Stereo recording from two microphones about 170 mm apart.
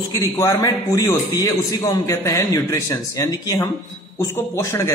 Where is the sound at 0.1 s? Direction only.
20° left (ahead or behind).